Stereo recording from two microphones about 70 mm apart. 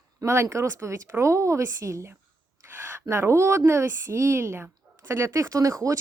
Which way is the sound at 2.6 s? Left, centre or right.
Right.